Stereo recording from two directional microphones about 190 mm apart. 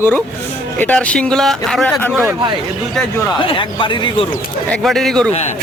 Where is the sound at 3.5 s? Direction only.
25° left (ahead or behind).